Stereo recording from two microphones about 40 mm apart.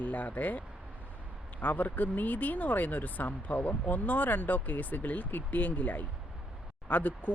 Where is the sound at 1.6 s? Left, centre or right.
Left.